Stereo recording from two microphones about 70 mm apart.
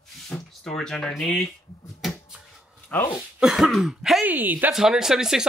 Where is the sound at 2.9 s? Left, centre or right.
Left.